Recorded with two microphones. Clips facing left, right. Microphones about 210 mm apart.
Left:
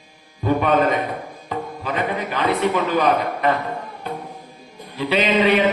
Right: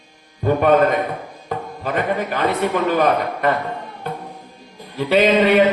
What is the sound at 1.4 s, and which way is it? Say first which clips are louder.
Tabla: right 2 dB; 45° right (ahead or behind).